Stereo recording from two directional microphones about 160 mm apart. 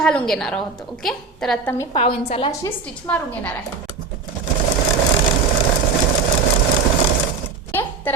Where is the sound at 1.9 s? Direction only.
35° left (ahead or behind).